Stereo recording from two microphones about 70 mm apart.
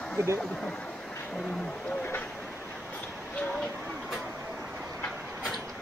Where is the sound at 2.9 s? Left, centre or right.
Centre.